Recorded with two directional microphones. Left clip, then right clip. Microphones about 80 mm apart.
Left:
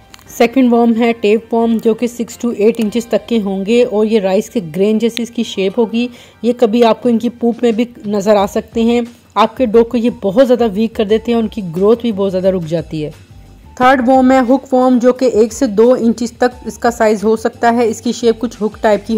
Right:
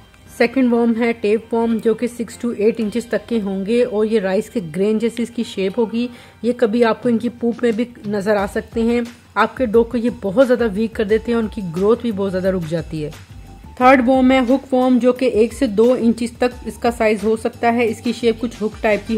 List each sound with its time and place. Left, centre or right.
0.7 s speech: left
0.9 s a woman's voice: left
1.5 s a woman's voice: left
1.8 s a woman's voice: left
14.9 s a woman's voice: left
15.1 s a woman's voice: left